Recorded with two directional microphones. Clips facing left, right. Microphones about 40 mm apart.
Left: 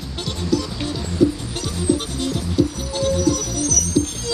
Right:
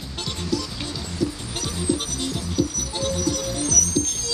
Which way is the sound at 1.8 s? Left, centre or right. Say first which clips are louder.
Left 5 dB; centre.